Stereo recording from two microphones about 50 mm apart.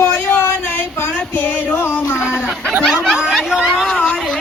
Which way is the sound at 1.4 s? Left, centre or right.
Left.